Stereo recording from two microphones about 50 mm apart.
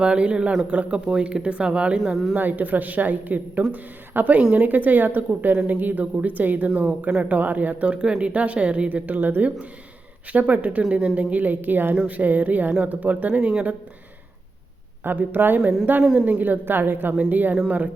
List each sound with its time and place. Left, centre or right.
0.0 s speech: right
2.3 s a woman's voice: right
9.1 s speech: right
10.3 s speech: right
15.0 s speech: right